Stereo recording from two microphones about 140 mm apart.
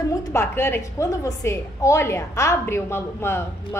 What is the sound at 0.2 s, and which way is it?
A woman's voice, 20° left (ahead or behind).